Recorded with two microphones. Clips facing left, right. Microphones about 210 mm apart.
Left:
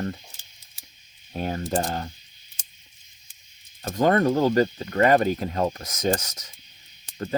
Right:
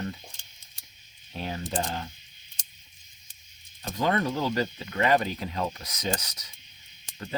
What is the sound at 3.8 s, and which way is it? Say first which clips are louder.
Speech: left 6 dB; 50° left (ahead or behind).